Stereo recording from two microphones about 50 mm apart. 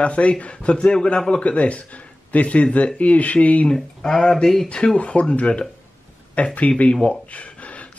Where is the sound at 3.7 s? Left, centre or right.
Centre.